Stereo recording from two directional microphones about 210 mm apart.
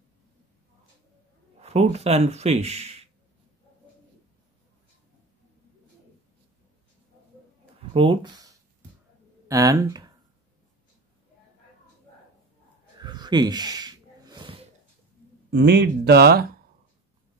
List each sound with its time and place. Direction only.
1.6 s speech: 30° right (ahead or behind)
7.9 s speech: 25° right (ahead or behind)
13.0 s snort: 20° right (ahead or behind)
15.5 s speech: 55° right (ahead or behind)